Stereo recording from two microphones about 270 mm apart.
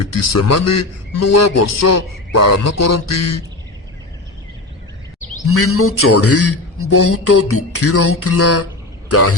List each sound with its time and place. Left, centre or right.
0.1 s a man's voice: left
5.5 s a man's voice: left